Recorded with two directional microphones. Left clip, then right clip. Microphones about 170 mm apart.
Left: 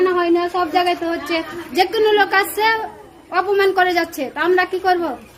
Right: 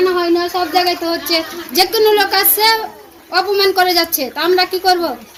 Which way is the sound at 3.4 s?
5° left (ahead or behind).